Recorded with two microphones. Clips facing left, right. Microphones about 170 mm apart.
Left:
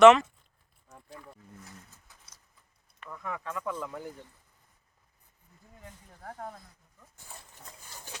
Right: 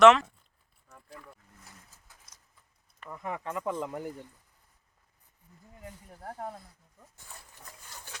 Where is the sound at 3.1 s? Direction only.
20° right (ahead or behind).